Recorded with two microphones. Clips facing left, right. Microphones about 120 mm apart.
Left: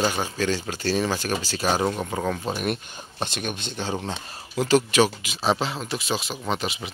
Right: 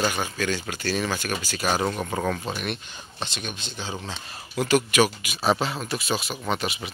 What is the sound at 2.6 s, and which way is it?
Speech, 45° left (ahead or behind).